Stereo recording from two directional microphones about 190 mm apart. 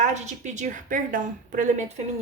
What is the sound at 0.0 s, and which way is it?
Speech, 40° right (ahead or behind).